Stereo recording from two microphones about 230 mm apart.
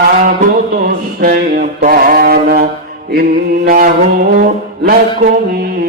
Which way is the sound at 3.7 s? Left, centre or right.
Right.